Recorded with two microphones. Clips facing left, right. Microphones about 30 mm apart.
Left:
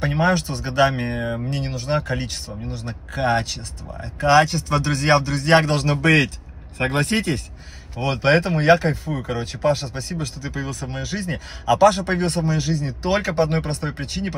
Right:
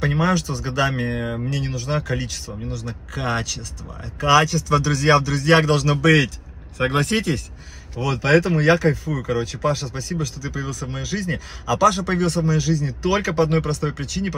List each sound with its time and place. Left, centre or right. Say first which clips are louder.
0.2 s speech: left 1 dB; left
1.1 s a sound: left 1 dB; centre
1.6 s a man's voice: left 1 dB; left
7.1 s speech: even; centre
8.0 s a man's voice: even; left
13.3 s a man's voice: right 1 dB; left
14.2 s speech: right 2 dB; centre